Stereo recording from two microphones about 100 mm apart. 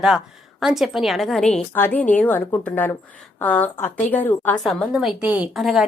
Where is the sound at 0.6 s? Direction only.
5° right (ahead or behind).